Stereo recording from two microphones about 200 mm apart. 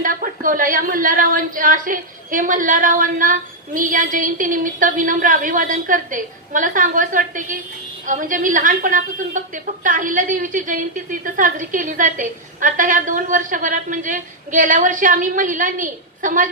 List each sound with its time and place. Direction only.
0.0 s a woman's voice: 45° right (ahead or behind)